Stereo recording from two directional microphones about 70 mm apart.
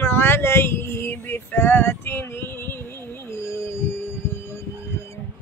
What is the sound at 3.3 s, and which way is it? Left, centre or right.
Music, left.